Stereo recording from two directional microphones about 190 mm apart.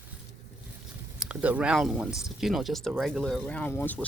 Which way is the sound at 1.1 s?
5° right (ahead or behind).